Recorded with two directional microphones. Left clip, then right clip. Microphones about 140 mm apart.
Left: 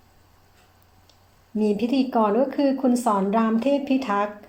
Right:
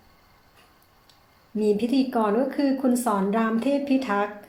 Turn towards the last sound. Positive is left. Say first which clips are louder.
# left 1 dB
turn(degrees=50)  # may be behind; listen again after turning